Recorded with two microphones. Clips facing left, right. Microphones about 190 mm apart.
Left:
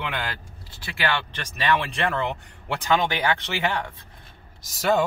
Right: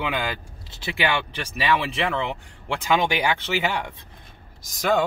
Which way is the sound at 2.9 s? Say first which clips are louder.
Right 1 dB; 15° right (ahead or behind).